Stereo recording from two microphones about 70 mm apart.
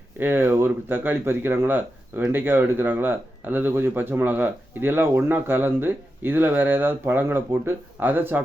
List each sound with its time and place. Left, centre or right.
0.2 s speech: right